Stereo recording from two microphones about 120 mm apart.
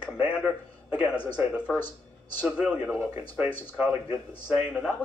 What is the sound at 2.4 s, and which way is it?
A man's voice, 10° right (ahead or behind).